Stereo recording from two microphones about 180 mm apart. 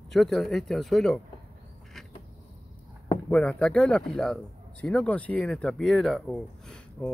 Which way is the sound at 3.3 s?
5° left (ahead or behind).